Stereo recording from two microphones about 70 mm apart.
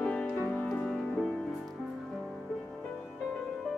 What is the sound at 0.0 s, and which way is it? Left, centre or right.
Music, centre.